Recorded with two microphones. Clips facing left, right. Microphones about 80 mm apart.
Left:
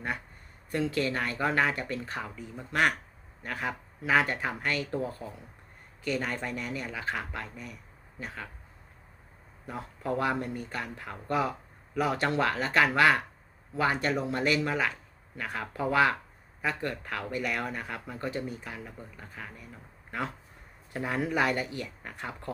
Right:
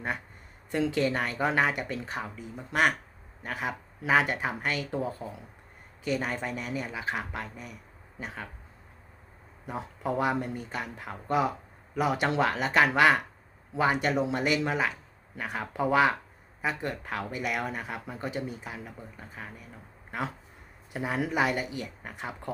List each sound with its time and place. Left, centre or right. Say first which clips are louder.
0.7 s speech: right 2 dB; right
2.2 s speech: right 1 dB; centre
10.1 s speech: right 1 dB; centre
20.1 s speech: right 1 dB; centre